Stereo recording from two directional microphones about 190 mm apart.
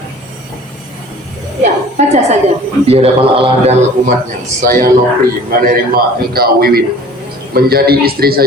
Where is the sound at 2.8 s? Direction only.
30° right (ahead or behind).